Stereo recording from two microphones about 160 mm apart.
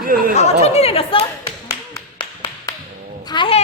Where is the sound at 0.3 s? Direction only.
45° left (ahead or behind).